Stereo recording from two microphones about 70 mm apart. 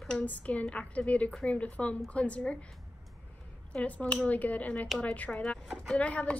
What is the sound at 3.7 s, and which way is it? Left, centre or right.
Speech, centre.